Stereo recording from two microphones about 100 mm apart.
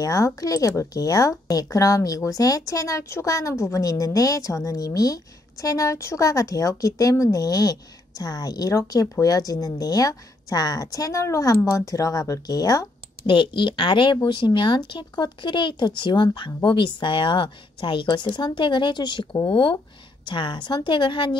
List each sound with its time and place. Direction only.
0.0 s speech: 35° left (ahead or behind)
13.3 s speech: 60° left (ahead or behind)